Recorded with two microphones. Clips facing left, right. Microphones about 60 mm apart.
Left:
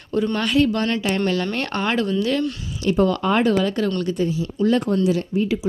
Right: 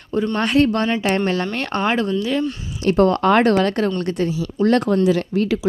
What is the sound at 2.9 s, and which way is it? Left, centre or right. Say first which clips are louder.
Speech: right 3 dB; right.